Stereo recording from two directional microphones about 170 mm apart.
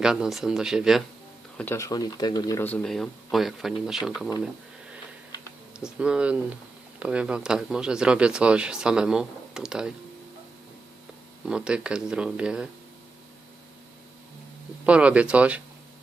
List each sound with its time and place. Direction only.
0.0 s speech: 5° right (ahead or behind)
1.5 s speech: 15° left (ahead or behind)
2.6 s speech: 5° left (ahead or behind)
5.7 s speech: 5° right (ahead or behind)
11.4 s speech: 5° right (ahead or behind)
14.8 s speech: 5° right (ahead or behind)